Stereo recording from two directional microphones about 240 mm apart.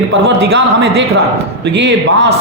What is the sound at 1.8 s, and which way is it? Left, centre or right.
Speech, right.